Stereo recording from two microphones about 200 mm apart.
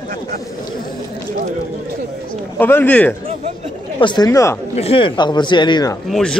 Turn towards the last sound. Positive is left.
turn(degrees=5)  # may be behind; listen again after turning